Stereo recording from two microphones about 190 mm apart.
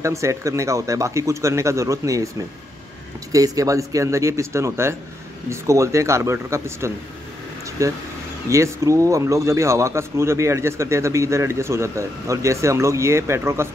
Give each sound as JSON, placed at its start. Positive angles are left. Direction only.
{"t": 0.0, "sound": "a man's voice", "side_deg": -15}
{"t": 3.3, "sound": "a man's voice", "side_deg": -20}